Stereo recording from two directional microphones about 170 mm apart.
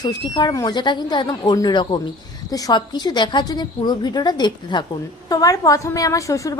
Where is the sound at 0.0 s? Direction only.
25° left (ahead or behind).